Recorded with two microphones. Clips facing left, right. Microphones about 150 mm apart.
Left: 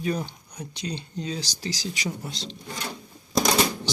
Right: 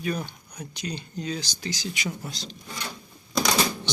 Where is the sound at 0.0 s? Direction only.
25° left (ahead or behind).